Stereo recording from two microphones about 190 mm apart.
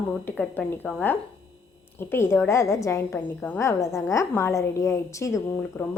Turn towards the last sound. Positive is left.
turn(degrees=15)  # may be behind; listen again after turning